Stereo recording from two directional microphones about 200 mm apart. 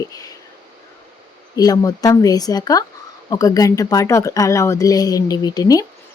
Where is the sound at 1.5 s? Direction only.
20° left (ahead or behind).